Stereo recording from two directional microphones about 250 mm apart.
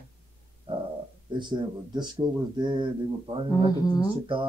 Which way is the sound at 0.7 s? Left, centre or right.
Right.